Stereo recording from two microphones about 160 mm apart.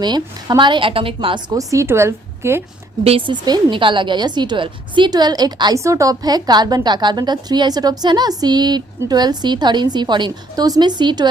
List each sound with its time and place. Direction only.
0.0 s a woman's voice: 25° right (ahead or behind)
1.5 s a woman's voice: 20° right (ahead or behind)
3.0 s a woman's voice: 35° right (ahead or behind)